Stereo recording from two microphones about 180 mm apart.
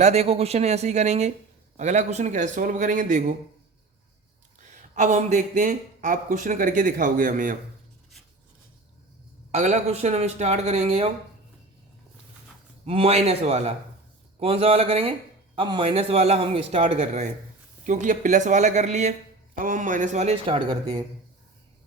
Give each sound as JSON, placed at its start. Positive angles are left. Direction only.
{"t": 0.0, "sound": "a man's voice", "side_deg": -35}
{"t": 4.8, "sound": "speech", "side_deg": -40}
{"t": 9.5, "sound": "a man's voice", "side_deg": -40}
{"t": 12.8, "sound": "a man's voice", "side_deg": -35}